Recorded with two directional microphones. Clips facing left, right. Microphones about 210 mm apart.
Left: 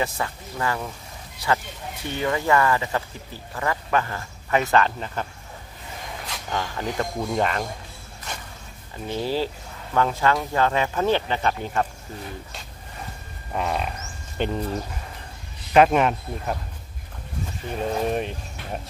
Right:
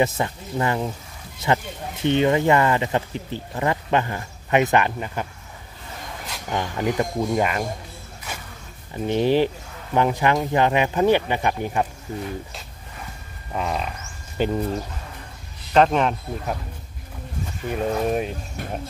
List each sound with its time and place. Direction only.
0.0 s speech: 20° right (ahead or behind)
6.5 s speech: 15° right (ahead or behind)
8.3 s a sound: 5° right (ahead or behind)
8.9 s speech: 20° right (ahead or behind)
13.5 s speech: centre (ahead or behind)
15.7 s speech: 5° left (ahead or behind)
17.6 s speech: 5° right (ahead or behind)
18.6 s speech: 45° right (ahead or behind)